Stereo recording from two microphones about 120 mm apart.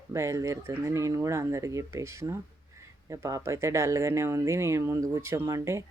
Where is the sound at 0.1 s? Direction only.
25° right (ahead or behind).